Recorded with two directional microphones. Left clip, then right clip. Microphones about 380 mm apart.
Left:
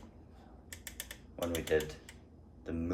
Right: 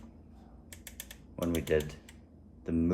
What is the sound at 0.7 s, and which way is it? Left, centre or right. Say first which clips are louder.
Typing: left 2 dB; centre.